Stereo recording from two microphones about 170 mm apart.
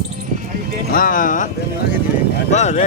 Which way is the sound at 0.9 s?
55° left (ahead or behind).